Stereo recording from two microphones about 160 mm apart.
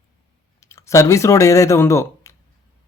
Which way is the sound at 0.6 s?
15° left (ahead or behind).